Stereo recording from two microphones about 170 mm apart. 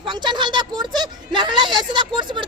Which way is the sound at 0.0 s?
25° right (ahead or behind).